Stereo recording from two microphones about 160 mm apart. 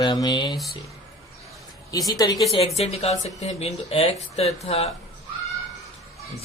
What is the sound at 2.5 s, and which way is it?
Speech, 40° left (ahead or behind).